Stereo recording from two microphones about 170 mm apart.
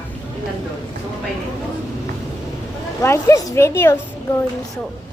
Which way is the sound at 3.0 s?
15° left (ahead or behind).